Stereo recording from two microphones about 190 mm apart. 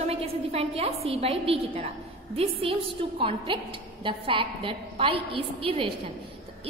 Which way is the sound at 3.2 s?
30° right (ahead or behind).